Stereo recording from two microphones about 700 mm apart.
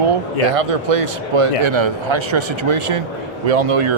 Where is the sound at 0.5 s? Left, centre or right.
Right.